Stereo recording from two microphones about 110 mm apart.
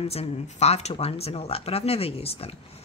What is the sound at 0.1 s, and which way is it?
Speech, 70° left (ahead or behind).